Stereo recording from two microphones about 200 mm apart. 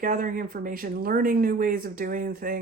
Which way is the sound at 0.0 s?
40° right (ahead or behind).